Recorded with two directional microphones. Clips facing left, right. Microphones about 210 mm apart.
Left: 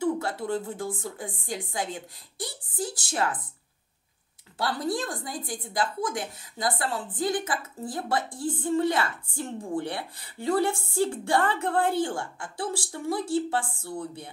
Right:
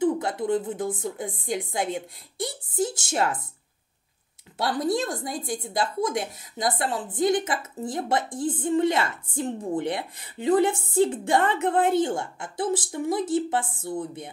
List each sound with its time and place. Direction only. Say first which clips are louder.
0.0 s a woman's voice: right 3 dB; 20° right (ahead or behind)
4.6 s a woman's voice: right 4 dB; 20° right (ahead or behind)